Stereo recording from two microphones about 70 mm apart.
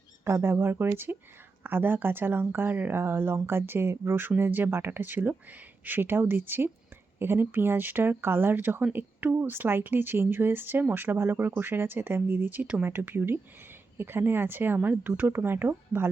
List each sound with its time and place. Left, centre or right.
0.3 s speech: right